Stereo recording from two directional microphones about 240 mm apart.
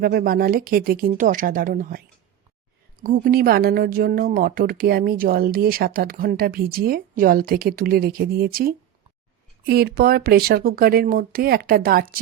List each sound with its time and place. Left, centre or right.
0.0 s a woman's voice: right
3.0 s a woman's voice: right